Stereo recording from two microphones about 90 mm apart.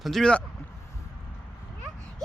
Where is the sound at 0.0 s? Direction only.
5° left (ahead or behind).